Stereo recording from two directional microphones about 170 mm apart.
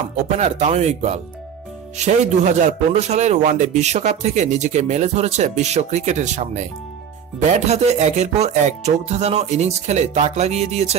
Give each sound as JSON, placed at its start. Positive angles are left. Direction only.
{"t": 0.1, "sound": "music", "side_deg": -40}
{"t": 2.0, "sound": "speech", "side_deg": -45}
{"t": 7.6, "sound": "music", "side_deg": -40}